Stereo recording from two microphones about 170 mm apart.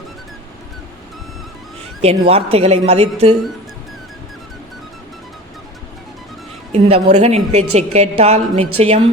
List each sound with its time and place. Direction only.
2.0 s a woman's voice: 35° right (ahead or behind)
6.7 s a woman's voice: 35° right (ahead or behind)